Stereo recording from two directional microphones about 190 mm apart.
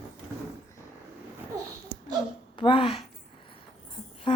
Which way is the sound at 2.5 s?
25° left (ahead or behind).